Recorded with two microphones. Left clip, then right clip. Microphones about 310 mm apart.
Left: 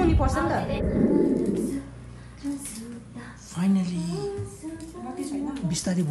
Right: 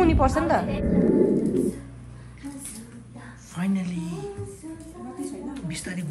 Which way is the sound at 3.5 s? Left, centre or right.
Centre.